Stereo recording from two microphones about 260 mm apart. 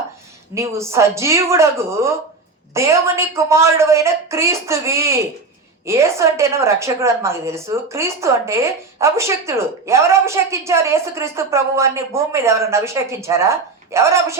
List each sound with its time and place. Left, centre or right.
0.5 s a woman's voice: centre